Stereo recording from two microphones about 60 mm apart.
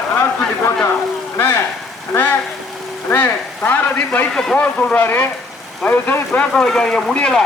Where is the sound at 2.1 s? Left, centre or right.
Left.